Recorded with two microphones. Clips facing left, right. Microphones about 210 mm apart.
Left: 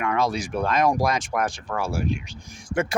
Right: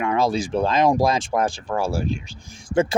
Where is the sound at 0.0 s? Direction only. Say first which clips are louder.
Right 3 dB; 30° right (ahead or behind).